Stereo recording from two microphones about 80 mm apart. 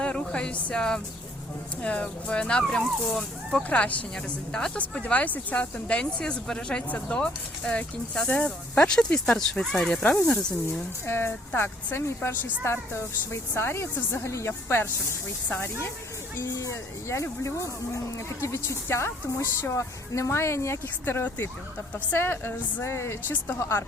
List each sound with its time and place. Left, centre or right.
0.0 s speech: centre
11.0 s speech: left
16.4 s speech: left
18.4 s speech: left